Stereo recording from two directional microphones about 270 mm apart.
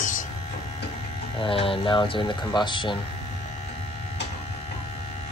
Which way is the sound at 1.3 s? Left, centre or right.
Centre.